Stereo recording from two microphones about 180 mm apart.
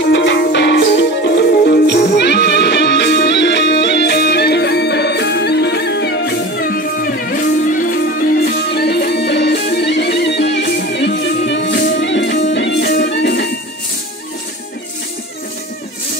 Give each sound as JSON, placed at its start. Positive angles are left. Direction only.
{"t": 0.0, "sound": "music", "side_deg": 75}
{"t": 8.7, "sound": "music", "side_deg": 65}
{"t": 11.7, "sound": "music", "side_deg": 65}